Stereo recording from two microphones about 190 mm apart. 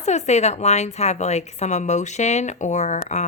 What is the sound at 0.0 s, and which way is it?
A woman's voice, 35° left (ahead or behind).